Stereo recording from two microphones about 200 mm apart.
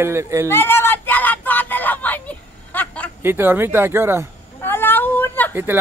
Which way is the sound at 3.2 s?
10° right (ahead or behind).